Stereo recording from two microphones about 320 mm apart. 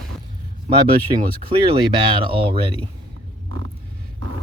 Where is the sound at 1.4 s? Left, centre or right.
Centre.